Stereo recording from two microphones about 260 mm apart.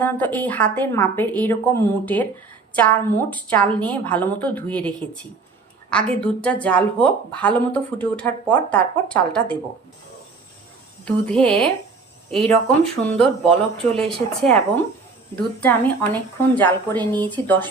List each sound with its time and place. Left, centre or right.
0.0 s speech: centre
11.0 s speech: centre